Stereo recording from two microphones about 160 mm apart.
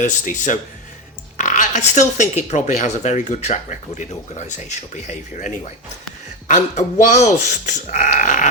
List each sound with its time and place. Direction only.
0.0 s speech: 55° left (ahead or behind)
7.0 s speech: 45° left (ahead or behind)